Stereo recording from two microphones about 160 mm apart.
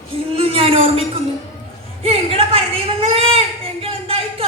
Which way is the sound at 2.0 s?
35° right (ahead or behind).